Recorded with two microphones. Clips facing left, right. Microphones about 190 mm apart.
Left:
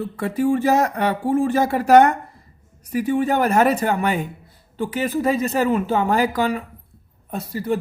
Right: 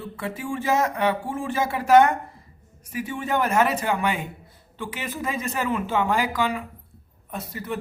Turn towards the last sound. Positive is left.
turn(degrees=35)  # may be behind; listen again after turning